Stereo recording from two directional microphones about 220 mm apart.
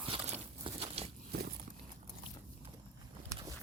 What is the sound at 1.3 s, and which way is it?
Walk, 45° right (ahead or behind).